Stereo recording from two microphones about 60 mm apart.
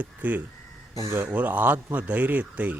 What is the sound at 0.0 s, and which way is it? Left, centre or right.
A man's voice, right.